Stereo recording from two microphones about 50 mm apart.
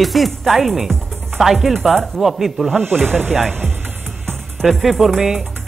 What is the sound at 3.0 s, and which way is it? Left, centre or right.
Speech, right.